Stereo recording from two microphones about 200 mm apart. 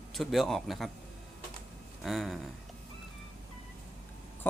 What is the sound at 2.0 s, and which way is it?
Speech, centre (ahead or behind).